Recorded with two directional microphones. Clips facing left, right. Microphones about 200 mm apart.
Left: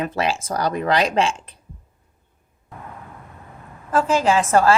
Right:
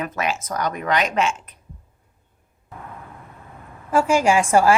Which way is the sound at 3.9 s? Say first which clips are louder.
Right 1 dB; 10° right (ahead or behind).